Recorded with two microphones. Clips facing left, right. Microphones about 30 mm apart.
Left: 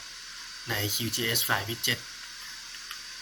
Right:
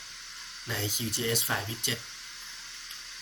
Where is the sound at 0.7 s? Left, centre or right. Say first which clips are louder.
Left 2 dB; centre.